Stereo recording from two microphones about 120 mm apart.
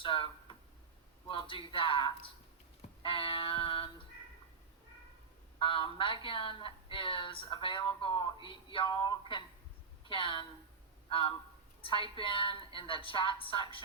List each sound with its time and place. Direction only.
0.0 s speech: 45° left (ahead or behind)
5.5 s speech: 45° left (ahead or behind)